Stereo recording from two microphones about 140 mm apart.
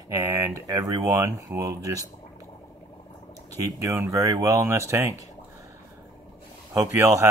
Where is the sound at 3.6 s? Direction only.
20° right (ahead or behind).